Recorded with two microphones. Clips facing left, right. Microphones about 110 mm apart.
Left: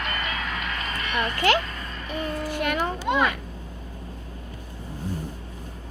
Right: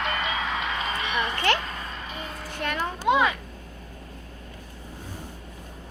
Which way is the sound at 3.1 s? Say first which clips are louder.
Right 3 dB; 10° right (ahead or behind).